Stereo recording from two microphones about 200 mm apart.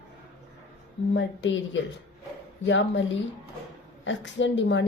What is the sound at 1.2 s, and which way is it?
A woman's voice, 65° left (ahead or behind).